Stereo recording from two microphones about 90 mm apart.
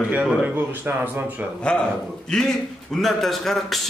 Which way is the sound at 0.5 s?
20° right (ahead or behind).